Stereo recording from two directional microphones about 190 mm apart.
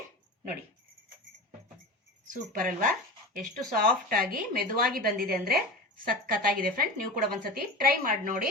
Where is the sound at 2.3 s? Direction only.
45° right (ahead or behind).